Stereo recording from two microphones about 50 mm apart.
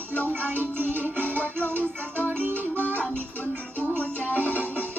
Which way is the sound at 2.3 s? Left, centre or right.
Right.